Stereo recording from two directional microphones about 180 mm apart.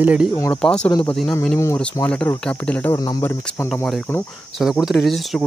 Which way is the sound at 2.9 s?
20° left (ahead or behind).